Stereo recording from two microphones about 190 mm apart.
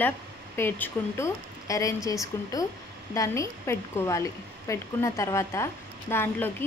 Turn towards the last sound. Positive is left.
turn(degrees=10)  # may be behind; listen again after turning